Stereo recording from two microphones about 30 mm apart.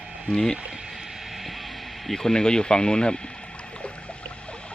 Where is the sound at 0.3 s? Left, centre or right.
Centre.